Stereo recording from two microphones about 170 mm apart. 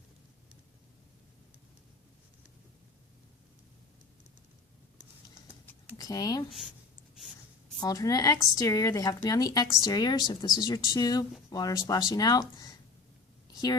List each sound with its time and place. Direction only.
6.0 s a woman's voice: 20° left (ahead or behind)
7.8 s a woman's voice: 20° left (ahead or behind)
13.5 s a sound: 25° left (ahead or behind)